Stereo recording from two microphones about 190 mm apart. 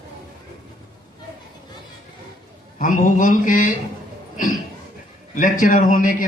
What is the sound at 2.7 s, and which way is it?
Speech, 45° left (ahead or behind).